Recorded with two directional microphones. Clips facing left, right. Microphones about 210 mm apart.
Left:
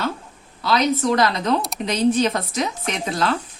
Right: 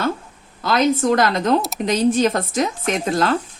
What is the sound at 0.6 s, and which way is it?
Speech, 50° right (ahead or behind).